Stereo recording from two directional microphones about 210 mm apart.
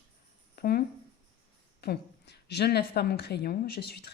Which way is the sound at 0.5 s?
45° left (ahead or behind).